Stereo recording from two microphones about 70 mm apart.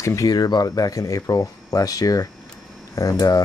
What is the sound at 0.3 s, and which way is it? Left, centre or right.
Speech, left.